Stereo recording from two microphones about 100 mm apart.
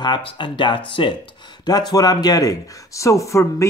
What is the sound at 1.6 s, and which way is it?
Speech, 45° left (ahead or behind).